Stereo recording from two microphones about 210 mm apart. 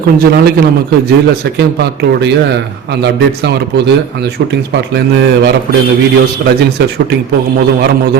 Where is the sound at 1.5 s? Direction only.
50° right (ahead or behind).